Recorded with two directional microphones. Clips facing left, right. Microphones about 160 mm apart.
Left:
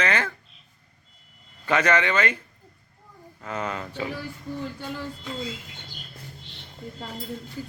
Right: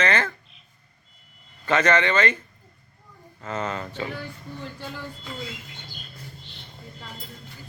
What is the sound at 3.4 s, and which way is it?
Speech, 10° left (ahead or behind).